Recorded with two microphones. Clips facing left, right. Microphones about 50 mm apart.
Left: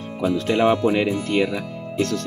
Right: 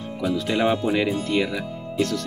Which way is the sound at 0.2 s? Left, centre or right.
Left.